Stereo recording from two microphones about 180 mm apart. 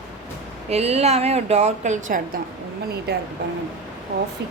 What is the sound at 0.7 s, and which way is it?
A woman's voice, 35° right (ahead or behind).